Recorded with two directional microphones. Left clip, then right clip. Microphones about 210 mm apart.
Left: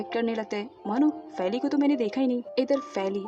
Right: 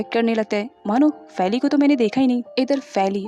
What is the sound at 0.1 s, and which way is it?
A woman's voice, 45° right (ahead or behind).